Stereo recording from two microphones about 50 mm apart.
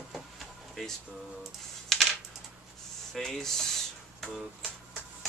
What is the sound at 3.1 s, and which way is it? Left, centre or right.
Speech, centre.